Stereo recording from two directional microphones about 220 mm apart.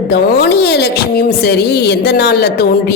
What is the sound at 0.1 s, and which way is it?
Speech, 50° left (ahead or behind).